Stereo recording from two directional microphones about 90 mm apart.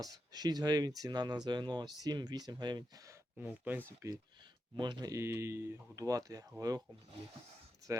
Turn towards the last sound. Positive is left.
turn(degrees=-40)  # may be behind; listen again after turning